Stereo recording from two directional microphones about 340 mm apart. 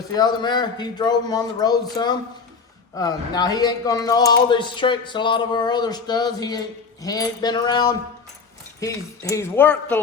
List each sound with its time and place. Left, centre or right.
0.1 s speech: centre